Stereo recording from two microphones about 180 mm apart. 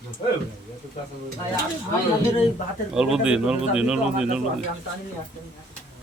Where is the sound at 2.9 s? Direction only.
5° right (ahead or behind).